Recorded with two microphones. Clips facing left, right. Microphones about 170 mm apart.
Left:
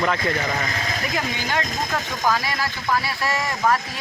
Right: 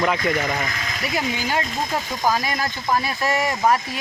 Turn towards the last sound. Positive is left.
turn(degrees=-15)  # may be behind; listen again after turning